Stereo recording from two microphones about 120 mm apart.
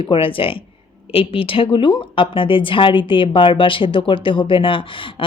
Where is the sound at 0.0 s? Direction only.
45° left (ahead or behind).